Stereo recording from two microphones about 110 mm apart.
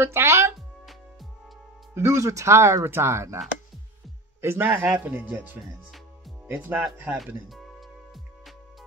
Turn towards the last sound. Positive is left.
turn(degrees=-15)  # may be behind; listen again after turning